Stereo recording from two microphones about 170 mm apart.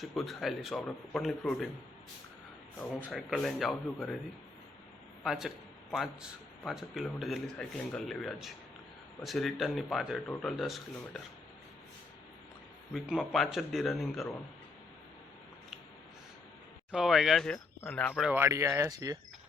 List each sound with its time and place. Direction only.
0.0 s speech: centre (ahead or behind)
3.2 s speech: centre (ahead or behind)
5.2 s a man's voice: 5° right (ahead or behind)
12.9 s speech: centre (ahead or behind)
16.9 s speech: centre (ahead or behind)
18.3 s speech: 15° right (ahead or behind)